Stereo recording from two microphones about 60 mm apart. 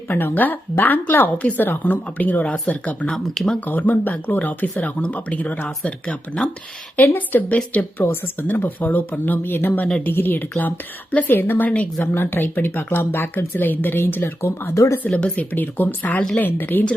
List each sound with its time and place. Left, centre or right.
0.1 s speech: left
1.4 s speech: left
1.6 s speech: left
3.3 s speech: centre
3.7 s speech: left
7.2 s speech: left
8.1 s speech: left
12.1 s speech: left
15.1 s speech: left